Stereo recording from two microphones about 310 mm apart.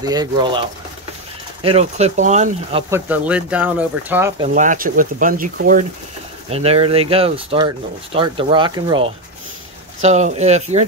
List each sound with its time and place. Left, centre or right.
0.0 s speech: centre
2.9 s speech: centre
4.6 s speech: right